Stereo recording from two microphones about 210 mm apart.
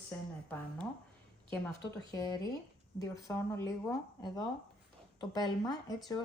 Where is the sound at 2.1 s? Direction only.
20° left (ahead or behind).